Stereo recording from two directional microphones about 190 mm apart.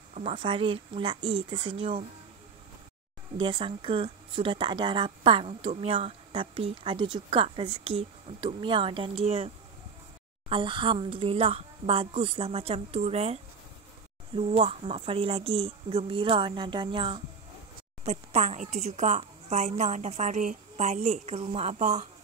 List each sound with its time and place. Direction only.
0.1 s speech: 35° right (ahead or behind)
3.3 s speech: 25° right (ahead or behind)
10.5 s speech: 25° right (ahead or behind)
18.0 s a woman's voice: 35° right (ahead or behind)